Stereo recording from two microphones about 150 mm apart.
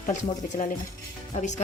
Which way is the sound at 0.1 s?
50° left (ahead or behind).